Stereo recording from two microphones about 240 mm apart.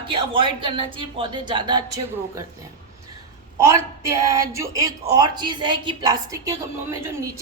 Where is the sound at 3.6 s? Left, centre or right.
Centre.